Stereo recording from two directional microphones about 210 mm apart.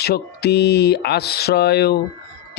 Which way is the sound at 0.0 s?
50° left (ahead or behind).